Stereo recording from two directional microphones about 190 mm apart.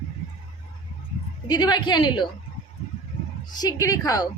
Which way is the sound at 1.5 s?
20° left (ahead or behind).